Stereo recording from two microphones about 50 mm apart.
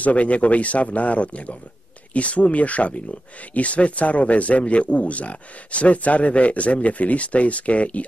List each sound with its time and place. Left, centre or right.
0.0 s speech: left